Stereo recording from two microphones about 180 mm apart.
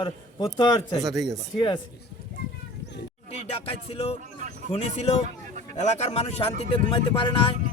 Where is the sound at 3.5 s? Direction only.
30° left (ahead or behind).